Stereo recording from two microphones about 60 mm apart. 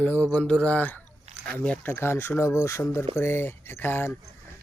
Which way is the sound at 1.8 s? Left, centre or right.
Left.